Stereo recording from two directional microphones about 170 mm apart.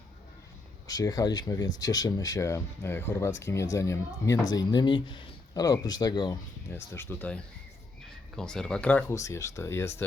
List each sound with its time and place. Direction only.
0.9 s speech: 20° left (ahead or behind)